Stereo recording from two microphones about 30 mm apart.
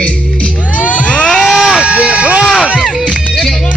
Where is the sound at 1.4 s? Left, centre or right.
Centre.